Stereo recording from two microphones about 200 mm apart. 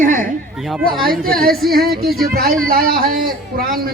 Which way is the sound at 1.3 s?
50° right (ahead or behind).